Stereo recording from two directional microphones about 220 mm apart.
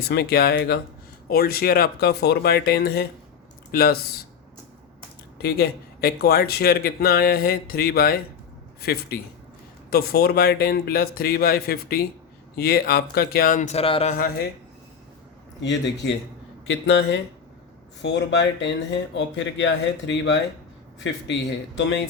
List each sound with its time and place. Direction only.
0.1 s speech: 45° left (ahead or behind)
5.4 s speech: 45° left (ahead or behind)
15.6 s speech: 55° left (ahead or behind)
21.8 s speech: 55° left (ahead or behind)